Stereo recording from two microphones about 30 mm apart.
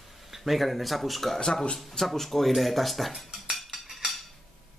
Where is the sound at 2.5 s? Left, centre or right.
Centre.